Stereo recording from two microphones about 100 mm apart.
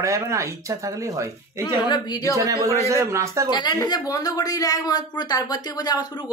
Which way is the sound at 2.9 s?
30° right (ahead or behind).